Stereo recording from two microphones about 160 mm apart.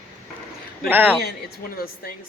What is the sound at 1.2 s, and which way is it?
Speech, 70° left (ahead or behind).